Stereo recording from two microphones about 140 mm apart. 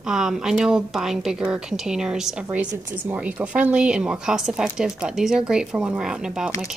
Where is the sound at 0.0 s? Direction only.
5° right (ahead or behind).